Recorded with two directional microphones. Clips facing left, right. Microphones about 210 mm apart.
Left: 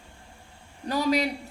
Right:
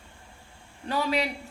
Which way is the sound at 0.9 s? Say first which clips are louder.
Left 3 dB; 40° left (ahead or behind).